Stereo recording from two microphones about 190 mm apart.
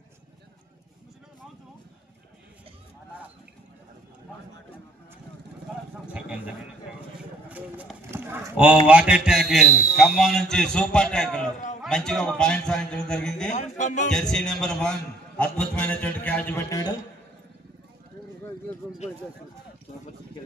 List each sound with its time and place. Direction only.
6.1 s a sound: 5° right (ahead or behind)
7.4 s clip-clop: 10° right (ahead or behind)
8.8 s a man's voice: 5° right (ahead or behind)
13.5 s speech: 40° left (ahead or behind)
14.1 s a man's voice: 5° left (ahead or behind)